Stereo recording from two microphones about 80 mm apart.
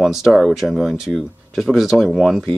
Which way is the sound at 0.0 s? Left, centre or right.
Centre.